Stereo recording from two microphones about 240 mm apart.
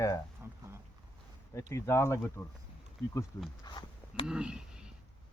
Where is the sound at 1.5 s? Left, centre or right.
Centre.